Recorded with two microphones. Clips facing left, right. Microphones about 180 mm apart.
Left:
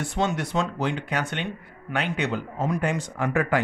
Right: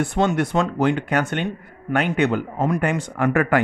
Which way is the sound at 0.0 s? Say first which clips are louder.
Right 6 dB; 55° right (ahead or behind).